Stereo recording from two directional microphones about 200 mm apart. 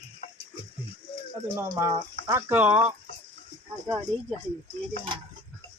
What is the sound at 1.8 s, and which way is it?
Speech, 15° right (ahead or behind).